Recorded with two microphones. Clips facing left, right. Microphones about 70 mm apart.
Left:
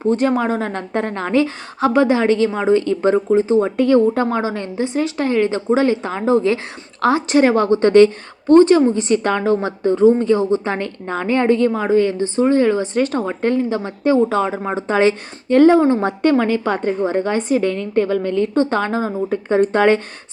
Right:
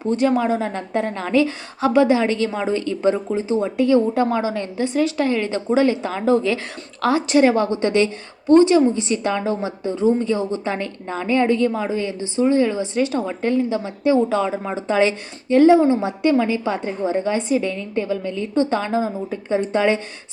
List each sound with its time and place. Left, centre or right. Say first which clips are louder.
0.0 s a woman's voice: left 2 dB; left